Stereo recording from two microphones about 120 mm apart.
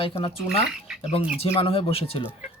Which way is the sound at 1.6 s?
50° left (ahead or behind).